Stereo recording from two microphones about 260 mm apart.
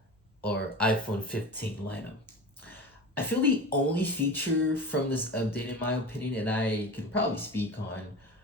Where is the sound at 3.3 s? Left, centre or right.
Centre.